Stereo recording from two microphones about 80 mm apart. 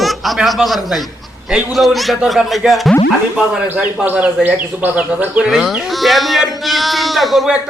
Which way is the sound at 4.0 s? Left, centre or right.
Centre.